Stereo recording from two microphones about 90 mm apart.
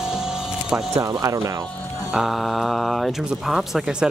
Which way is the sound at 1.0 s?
40° right (ahead or behind).